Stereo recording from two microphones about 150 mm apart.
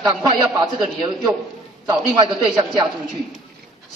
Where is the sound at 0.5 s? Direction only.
30° right (ahead or behind).